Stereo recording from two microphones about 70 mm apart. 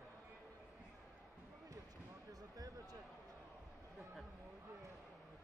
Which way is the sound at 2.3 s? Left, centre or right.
Right.